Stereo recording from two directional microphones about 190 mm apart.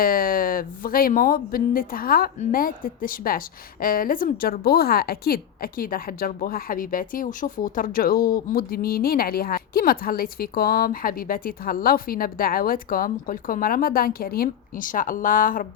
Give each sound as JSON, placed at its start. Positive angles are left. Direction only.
{"t": 0.0, "sound": "a woman's voice", "side_deg": 50}